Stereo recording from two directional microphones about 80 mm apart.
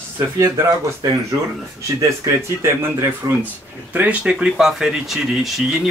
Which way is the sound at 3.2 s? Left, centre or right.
Right.